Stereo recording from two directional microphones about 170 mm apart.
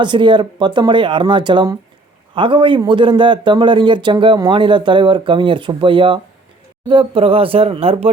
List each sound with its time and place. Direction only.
0.0 s a man's voice: 30° right (ahead or behind)